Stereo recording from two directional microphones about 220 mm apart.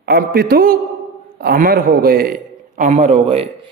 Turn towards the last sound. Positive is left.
turn(degrees=-30)  # may be behind; listen again after turning